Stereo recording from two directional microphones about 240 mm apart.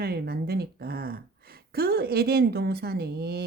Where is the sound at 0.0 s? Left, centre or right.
Right.